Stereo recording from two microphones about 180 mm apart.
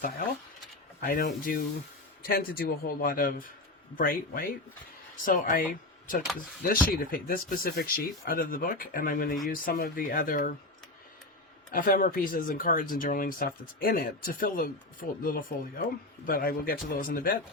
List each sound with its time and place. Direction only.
1.0 s a man's voice: 55° left (ahead or behind)
6.7 s speech: 55° left (ahead or behind)
11.7 s speech: 50° left (ahead or behind)